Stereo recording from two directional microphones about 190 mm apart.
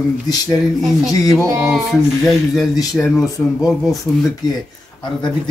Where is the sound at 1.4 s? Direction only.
15° right (ahead or behind).